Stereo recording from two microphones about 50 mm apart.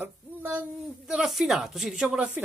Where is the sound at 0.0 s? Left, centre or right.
Right.